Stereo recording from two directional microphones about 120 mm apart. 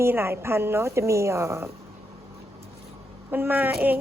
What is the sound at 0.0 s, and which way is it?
A woman's voice, 20° right (ahead or behind).